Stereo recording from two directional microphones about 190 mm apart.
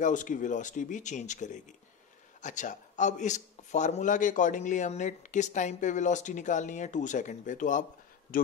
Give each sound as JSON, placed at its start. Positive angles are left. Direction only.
{"t": 0.0, "sound": "speech", "side_deg": 40}